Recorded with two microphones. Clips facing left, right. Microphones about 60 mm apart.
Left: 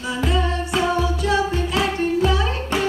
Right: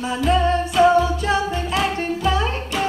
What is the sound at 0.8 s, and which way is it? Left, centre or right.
Music, right.